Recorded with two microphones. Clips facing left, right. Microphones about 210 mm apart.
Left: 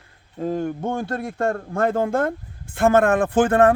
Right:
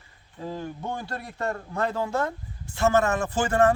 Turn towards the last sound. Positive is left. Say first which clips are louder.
# left 6 dB
turn(degrees=55)  # may be behind; listen again after turning